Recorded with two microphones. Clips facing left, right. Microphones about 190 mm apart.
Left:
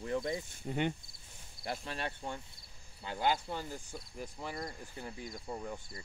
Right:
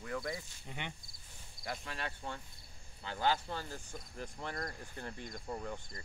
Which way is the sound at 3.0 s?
15° left (ahead or behind).